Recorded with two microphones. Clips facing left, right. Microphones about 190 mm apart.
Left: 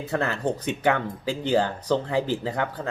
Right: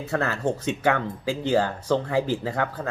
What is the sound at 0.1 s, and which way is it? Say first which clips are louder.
Speech: right 1 dB; 25° left (ahead or behind).